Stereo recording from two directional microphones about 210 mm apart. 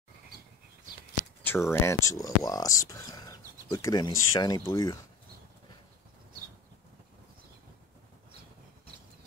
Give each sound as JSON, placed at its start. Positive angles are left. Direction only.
{"t": 1.4, "sound": "speech", "side_deg": 10}